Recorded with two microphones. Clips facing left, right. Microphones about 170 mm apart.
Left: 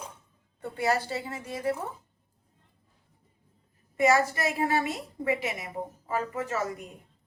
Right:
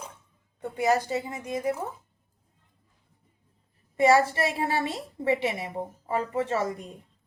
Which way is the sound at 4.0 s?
30° right (ahead or behind).